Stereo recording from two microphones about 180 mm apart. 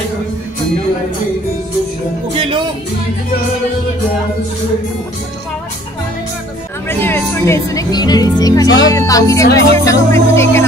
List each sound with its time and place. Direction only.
2.3 s speech: 30° right (ahead or behind)
6.9 s speech: 10° left (ahead or behind)